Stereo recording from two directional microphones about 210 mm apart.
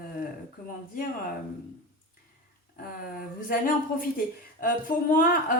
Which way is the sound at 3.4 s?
40° left (ahead or behind).